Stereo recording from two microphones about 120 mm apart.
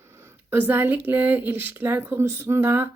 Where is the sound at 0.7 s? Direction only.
15° right (ahead or behind).